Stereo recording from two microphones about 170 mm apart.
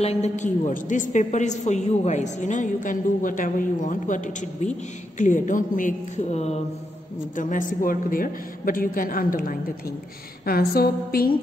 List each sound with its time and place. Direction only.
0.0 s a woman's voice: 40° left (ahead or behind)
7.3 s a woman's voice: 50° left (ahead or behind)